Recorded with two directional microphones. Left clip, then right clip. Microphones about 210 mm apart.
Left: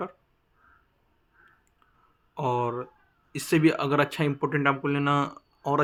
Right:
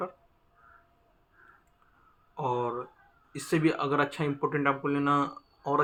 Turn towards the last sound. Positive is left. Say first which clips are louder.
# left 2 dB
turn(degrees=55)  # may be behind; listen again after turning